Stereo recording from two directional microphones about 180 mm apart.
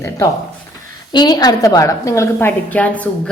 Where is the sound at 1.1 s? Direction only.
25° left (ahead or behind).